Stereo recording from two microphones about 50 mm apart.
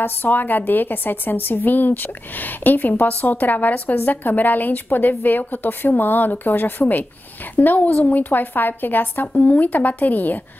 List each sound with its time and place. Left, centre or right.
0.0 s a woman's voice: left